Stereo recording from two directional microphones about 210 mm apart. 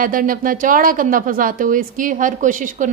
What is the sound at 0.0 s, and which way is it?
Speech, 40° right (ahead or behind).